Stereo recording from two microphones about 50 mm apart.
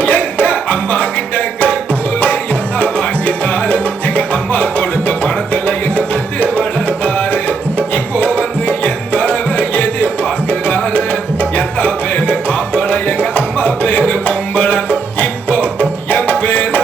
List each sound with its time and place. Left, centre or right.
0.0 s music: left
2.2 s music: left